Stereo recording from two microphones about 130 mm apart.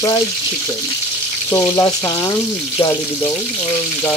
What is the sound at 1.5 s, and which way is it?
Frying, 20° left (ahead or behind).